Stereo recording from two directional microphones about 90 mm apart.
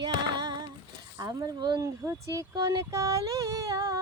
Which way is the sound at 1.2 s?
45° right (ahead or behind).